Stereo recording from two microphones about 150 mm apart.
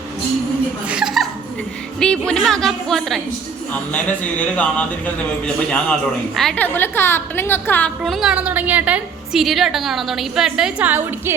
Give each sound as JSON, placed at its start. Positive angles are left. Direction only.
{"t": 0.9, "sound": "chuckle", "side_deg": -5}
{"t": 2.0, "sound": "a woman's voice", "side_deg": 5}